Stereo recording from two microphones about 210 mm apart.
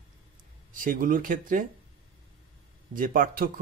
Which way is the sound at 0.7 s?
40° right (ahead or behind).